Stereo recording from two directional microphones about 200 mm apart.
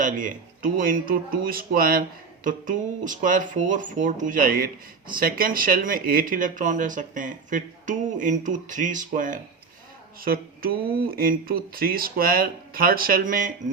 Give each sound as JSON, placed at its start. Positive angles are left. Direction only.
{"t": 0.0, "sound": "speech", "side_deg": -40}